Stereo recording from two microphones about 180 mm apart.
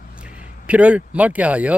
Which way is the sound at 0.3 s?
45° left (ahead or behind).